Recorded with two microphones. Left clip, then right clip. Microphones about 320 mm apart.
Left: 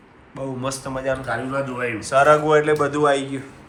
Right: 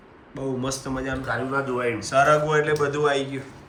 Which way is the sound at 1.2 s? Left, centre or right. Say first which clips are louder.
Left 1 dB; right.